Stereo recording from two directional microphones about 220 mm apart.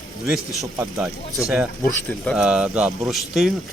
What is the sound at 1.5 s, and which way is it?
Speech, centre (ahead or behind).